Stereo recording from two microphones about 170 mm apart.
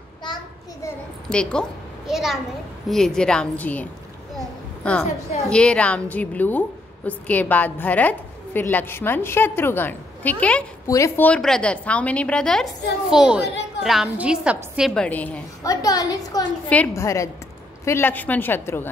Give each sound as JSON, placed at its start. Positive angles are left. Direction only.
{"t": 1.3, "sound": "a child's voice", "side_deg": 5}
{"t": 5.4, "sound": "a woman's voice", "side_deg": 5}
{"t": 15.0, "sound": "a woman's voice", "side_deg": 10}
{"t": 15.6, "sound": "a woman's voice", "side_deg": 20}
{"t": 16.6, "sound": "a woman's voice", "side_deg": 10}